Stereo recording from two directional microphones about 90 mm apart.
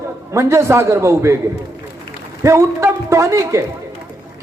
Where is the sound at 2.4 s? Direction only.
30° right (ahead or behind).